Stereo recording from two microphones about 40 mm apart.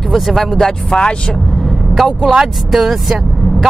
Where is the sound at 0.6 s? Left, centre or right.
Centre.